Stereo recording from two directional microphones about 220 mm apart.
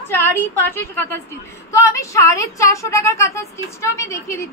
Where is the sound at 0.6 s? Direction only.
10° left (ahead or behind).